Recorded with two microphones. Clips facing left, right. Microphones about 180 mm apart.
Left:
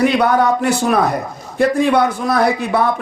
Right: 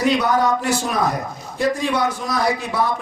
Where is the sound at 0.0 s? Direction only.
60° left (ahead or behind).